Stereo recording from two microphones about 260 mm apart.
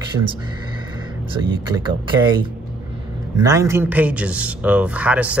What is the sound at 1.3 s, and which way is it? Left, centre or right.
Speech, centre.